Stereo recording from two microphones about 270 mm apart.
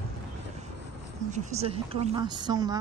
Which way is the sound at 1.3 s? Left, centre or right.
Right.